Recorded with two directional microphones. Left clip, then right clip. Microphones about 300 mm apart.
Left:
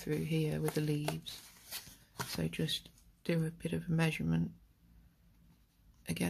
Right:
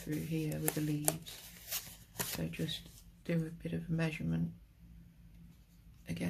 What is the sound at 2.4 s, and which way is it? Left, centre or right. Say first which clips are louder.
Speech: left 3 dB; left.